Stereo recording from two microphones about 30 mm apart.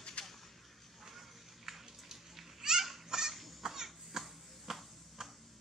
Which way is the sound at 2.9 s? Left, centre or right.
Centre.